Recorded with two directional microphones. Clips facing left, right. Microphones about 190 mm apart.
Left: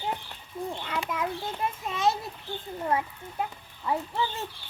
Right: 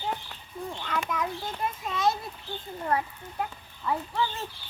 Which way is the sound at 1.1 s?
10° left (ahead or behind).